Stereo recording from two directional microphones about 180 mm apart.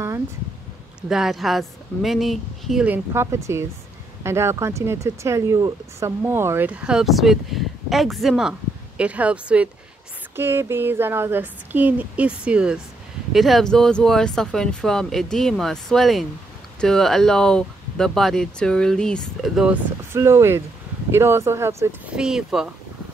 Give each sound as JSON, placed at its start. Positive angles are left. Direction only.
{"t": 1.0, "sound": "speech", "side_deg": 0}
{"t": 3.1, "sound": "speech", "side_deg": -15}